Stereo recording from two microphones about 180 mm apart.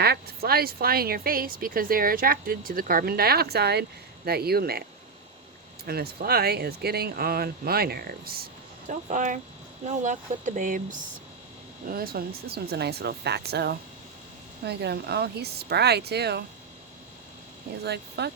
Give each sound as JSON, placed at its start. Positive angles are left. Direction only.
{"t": 0.0, "sound": "speech", "side_deg": -60}
{"t": 5.8, "sound": "speech", "side_deg": -60}
{"t": 8.9, "sound": "speech", "side_deg": -45}
{"t": 11.9, "sound": "speech", "side_deg": -55}
{"t": 17.8, "sound": "speech", "side_deg": -65}